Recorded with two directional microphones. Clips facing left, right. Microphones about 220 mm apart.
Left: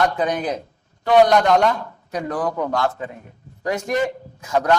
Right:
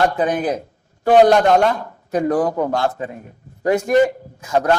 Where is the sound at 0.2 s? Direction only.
50° right (ahead or behind).